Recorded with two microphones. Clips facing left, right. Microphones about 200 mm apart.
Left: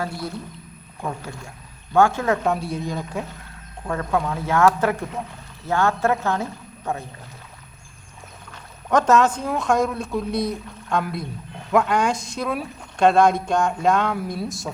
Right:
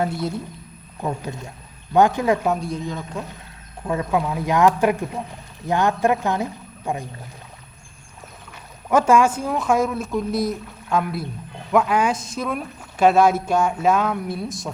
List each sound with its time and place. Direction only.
0.0 s speech: 20° right (ahead or behind)
2.6 s speech: 5° left (ahead or behind)
3.8 s speech: 10° right (ahead or behind)
8.9 s speech: 10° right (ahead or behind)